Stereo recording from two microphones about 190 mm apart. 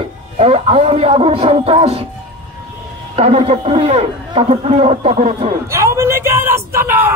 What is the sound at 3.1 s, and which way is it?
A man's voice, 35° right (ahead or behind).